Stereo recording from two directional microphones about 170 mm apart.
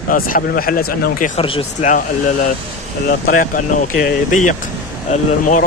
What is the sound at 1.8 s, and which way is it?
Speech, 50° left (ahead or behind).